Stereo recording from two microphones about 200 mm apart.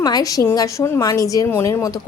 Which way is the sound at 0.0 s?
20° left (ahead or behind).